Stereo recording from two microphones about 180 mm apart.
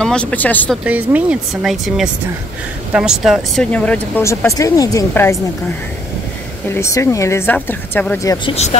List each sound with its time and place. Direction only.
0.0 s speech: 5° left (ahead or behind)
0.8 s speech: 10° right (ahead or behind)
3.7 s speech: 5° left (ahead or behind)
6.7 s speech: 15° left (ahead or behind)